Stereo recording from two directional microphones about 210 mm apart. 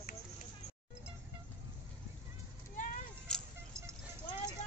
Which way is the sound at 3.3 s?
5° left (ahead or behind).